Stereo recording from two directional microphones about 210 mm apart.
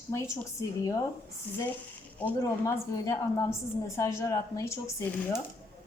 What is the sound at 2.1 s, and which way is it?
A woman's voice, 10° left (ahead or behind).